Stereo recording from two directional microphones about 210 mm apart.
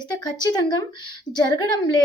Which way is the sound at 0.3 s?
20° left (ahead or behind).